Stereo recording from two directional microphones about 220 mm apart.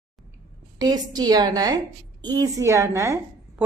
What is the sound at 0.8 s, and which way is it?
A woman's voice, 20° right (ahead or behind).